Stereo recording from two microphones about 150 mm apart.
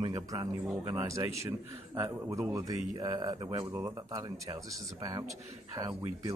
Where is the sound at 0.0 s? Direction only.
25° right (ahead or behind).